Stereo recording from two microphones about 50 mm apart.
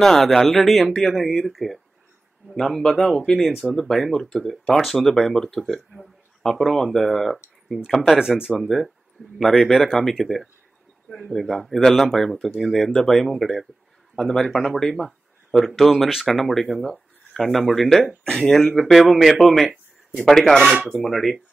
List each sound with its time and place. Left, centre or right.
0.0 s speech: centre
18.8 s speech: left
19.1 s speech: centre